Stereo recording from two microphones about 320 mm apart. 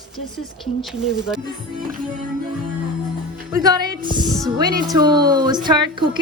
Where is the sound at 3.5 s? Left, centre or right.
Centre.